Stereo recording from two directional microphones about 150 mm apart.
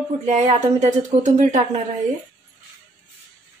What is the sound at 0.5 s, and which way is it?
Speech, 50° right (ahead or behind).